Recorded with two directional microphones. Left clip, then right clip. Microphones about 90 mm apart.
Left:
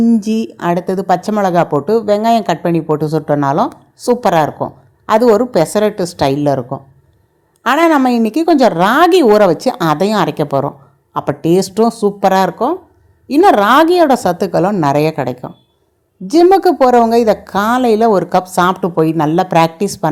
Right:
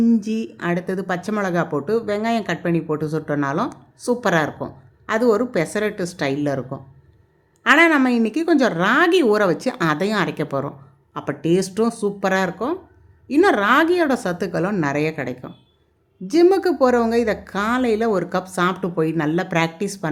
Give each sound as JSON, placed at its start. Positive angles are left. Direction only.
{"t": 0.2, "sound": "a woman's voice", "side_deg": 60}
{"t": 16.2, "sound": "a woman's voice", "side_deg": 45}